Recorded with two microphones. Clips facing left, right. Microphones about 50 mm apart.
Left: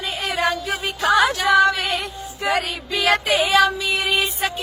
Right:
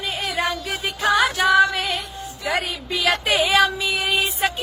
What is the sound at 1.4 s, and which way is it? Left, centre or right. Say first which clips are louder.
Female singing: even; centre.